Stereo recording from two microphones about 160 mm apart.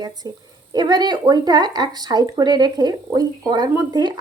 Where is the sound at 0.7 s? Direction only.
25° right (ahead or behind).